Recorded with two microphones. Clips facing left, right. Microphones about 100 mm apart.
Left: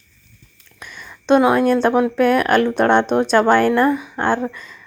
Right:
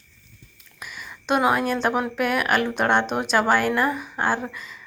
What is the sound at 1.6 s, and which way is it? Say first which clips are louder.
A woman's voice: left 8 dB; 5° right (ahead or behind).